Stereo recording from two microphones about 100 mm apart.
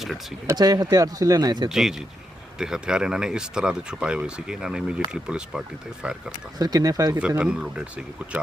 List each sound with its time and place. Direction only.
0.5 s speech: 40° right (ahead or behind)
1.7 s speech: 5° right (ahead or behind)
6.6 s speech: 40° right (ahead or behind)
7.2 s speech: 10° right (ahead or behind)